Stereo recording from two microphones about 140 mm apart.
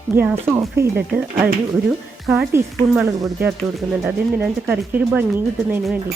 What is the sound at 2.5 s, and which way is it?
Speech, 20° right (ahead or behind).